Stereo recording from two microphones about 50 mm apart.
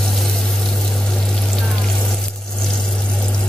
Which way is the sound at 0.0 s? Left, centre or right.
Centre.